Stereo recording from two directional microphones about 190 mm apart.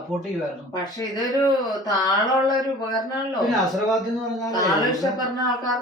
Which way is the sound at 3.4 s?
Centre (ahead or behind).